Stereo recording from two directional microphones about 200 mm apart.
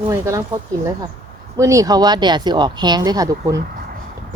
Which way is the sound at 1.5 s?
15° right (ahead or behind).